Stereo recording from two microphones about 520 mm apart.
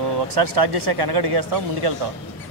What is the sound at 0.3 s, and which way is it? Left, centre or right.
Speech, right.